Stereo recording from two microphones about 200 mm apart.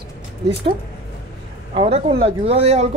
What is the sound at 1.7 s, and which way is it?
Speech, 30° right (ahead or behind).